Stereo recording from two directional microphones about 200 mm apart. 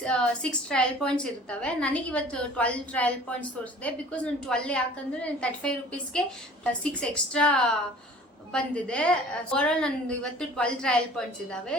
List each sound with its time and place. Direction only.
0.0 s a woman's voice: 5° left (ahead or behind)